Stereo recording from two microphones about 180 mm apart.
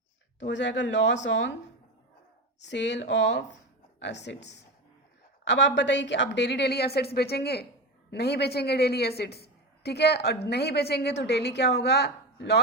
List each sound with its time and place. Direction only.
0.3 s a woman's voice: 80° left
2.6 s a woman's voice: 75° left (ahead or behind)